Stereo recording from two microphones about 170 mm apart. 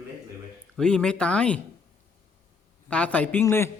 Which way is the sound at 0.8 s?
5° left (ahead or behind).